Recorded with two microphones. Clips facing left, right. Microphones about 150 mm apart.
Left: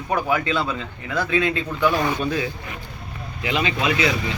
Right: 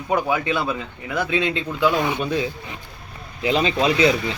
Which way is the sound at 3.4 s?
35° right (ahead or behind).